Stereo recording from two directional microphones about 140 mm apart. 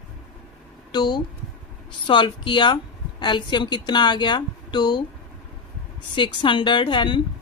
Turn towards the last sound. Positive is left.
turn(degrees=35)  # may be behind; listen again after turning